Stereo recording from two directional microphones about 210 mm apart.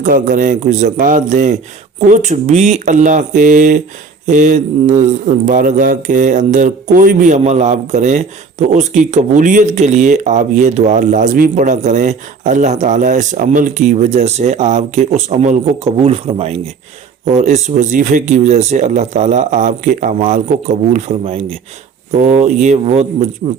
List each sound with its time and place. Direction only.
0.0 s speech: 40° right (ahead or behind)